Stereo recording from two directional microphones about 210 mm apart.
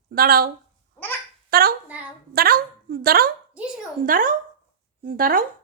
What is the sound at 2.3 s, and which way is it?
A woman's voice, 45° right (ahead or behind).